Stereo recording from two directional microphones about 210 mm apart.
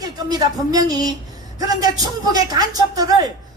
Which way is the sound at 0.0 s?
20° right (ahead or behind).